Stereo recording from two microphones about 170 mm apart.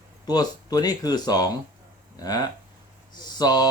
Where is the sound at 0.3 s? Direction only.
20° left (ahead or behind).